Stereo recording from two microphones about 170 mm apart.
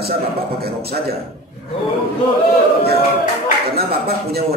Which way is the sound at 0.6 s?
65° right (ahead or behind).